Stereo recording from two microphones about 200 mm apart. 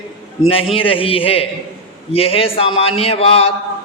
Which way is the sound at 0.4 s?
30° left (ahead or behind).